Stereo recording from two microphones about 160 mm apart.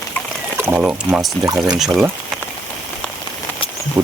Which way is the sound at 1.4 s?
20° right (ahead or behind).